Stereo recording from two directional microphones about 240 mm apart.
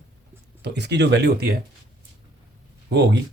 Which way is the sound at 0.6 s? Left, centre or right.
Right.